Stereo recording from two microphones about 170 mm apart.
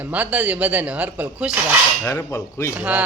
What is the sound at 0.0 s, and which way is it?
A man's voice, 10° right (ahead or behind).